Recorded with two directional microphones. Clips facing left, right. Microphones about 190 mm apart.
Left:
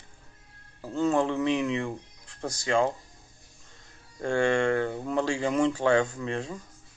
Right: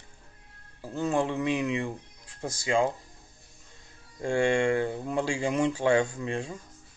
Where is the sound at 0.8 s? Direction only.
10° right (ahead or behind).